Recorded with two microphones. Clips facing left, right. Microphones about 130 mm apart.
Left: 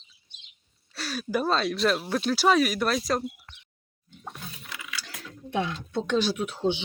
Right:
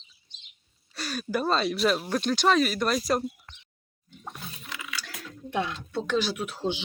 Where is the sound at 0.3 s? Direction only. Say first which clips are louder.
Even; 55° left (ahead or behind).